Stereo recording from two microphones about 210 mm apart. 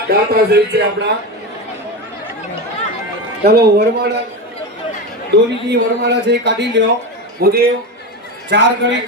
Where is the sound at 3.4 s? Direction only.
50° right (ahead or behind).